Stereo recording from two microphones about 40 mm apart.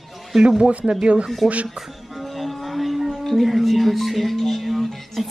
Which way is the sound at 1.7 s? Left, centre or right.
Centre.